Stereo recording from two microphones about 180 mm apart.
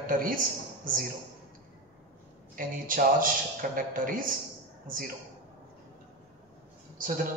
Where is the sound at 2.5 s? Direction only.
50° right (ahead or behind).